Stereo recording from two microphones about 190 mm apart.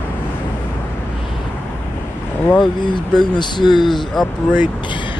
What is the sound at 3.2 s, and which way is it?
Speech, 25° left (ahead or behind).